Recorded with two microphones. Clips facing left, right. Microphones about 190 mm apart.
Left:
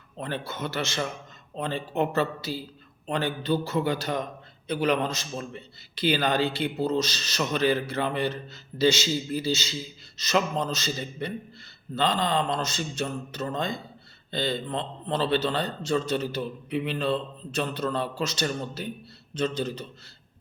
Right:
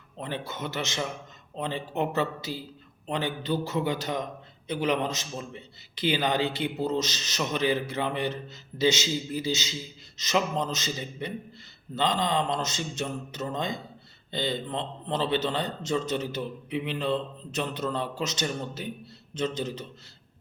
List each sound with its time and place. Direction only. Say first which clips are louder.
0.2 s a man's voice: left 2 dB; 15° right (ahead or behind)